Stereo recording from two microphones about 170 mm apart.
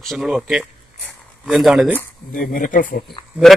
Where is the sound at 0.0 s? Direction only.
Centre (ahead or behind).